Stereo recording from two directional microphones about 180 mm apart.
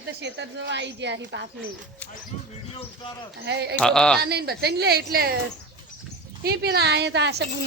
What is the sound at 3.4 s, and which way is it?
Speech, 70° right (ahead or behind).